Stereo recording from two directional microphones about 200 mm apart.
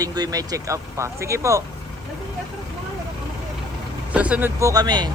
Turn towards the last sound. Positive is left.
turn(degrees=-20)  # may be behind; listen again after turning